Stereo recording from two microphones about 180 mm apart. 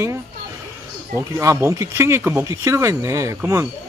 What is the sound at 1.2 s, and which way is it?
Speech, 15° right (ahead or behind).